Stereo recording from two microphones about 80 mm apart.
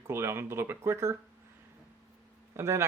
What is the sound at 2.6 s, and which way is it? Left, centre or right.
Speech, right.